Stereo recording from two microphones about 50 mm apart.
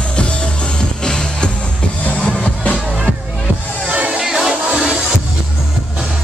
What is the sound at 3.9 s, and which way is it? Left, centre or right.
Music, right.